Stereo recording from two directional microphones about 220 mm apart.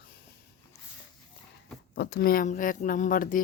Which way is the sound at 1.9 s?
50° left (ahead or behind).